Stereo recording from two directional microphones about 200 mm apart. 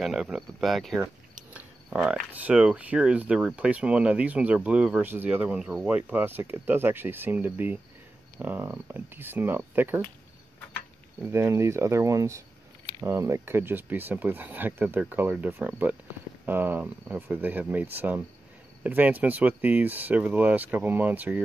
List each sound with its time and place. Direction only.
0.0 s speech: 5° right (ahead or behind)
11.2 s speech: 10° right (ahead or behind)